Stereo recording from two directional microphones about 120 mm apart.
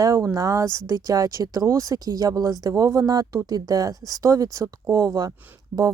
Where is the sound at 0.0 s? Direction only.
30° right (ahead or behind).